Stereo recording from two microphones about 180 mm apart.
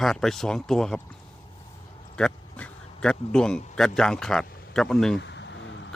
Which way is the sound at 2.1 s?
5° left (ahead or behind).